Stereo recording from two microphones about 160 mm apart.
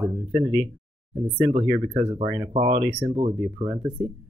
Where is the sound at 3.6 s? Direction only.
10° right (ahead or behind).